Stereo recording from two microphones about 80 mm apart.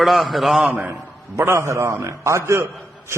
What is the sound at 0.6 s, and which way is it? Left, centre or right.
Speech, centre.